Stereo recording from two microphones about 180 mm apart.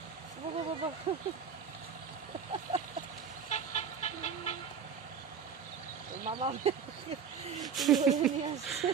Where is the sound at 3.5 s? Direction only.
40° left (ahead or behind).